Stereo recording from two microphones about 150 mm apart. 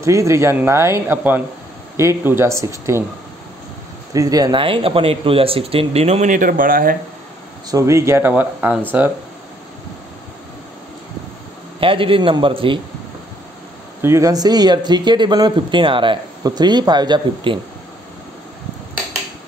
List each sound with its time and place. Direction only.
0.0 s speech: 20° right (ahead or behind)
4.1 s speech: 25° right (ahead or behind); by 7.0 s 70° right (ahead or behind)
7.7 s speech: 20° right (ahead or behind)
11.8 s speech: 35° right (ahead or behind)
14.0 s speech: 20° right (ahead or behind)